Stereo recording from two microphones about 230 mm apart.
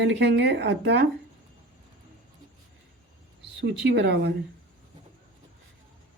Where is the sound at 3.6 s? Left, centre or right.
Right.